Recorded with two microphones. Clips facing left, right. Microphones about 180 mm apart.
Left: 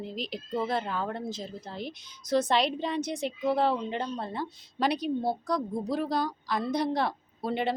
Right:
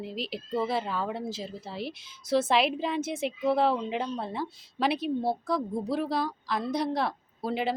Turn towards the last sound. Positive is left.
turn(degrees=0)  # may be behind; listen again after turning